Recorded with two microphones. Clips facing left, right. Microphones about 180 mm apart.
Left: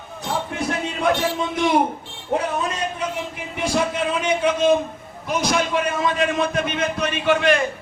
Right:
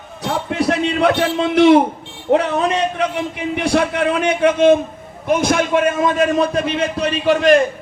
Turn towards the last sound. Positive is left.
turn(degrees=-40)  # may be behind; listen again after turning